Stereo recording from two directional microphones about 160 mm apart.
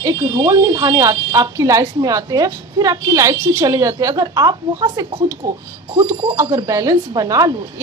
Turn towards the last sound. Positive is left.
turn(degrees=-20)  # may be behind; listen again after turning